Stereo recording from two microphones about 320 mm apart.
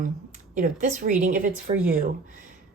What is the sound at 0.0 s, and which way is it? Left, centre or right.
A woman's voice, right.